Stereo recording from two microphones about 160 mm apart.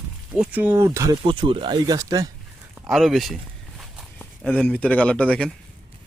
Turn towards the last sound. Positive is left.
turn(degrees=5)  # may be behind; listen again after turning